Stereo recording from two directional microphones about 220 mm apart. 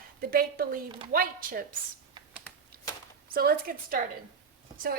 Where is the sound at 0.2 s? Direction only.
40° right (ahead or behind).